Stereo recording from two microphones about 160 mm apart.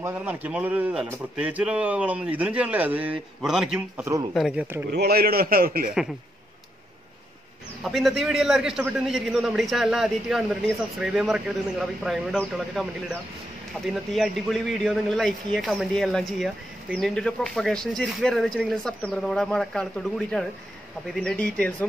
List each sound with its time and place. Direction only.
0.0 s speech: 10° right (ahead or behind)
4.0 s speech: 20° right (ahead or behind)
4.3 s a man's voice: centre (ahead or behind)
4.9 s a man's voice: 75° right (ahead or behind)
7.8 s a man's voice: centre (ahead or behind)